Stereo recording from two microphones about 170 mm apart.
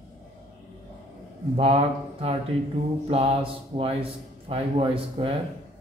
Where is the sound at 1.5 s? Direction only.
35° right (ahead or behind).